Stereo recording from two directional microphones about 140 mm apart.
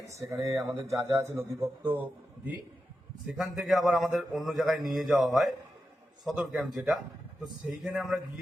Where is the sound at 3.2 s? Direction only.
Centre (ahead or behind).